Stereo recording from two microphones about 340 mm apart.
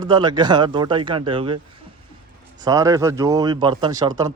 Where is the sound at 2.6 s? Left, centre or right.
Centre.